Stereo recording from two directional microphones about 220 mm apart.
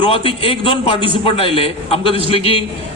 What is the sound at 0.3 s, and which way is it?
Speech, 25° left (ahead or behind).